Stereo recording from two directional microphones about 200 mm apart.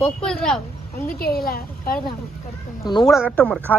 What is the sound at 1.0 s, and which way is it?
Speech, 50° left (ahead or behind).